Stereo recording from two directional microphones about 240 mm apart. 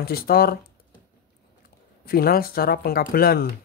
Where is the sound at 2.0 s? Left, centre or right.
Left.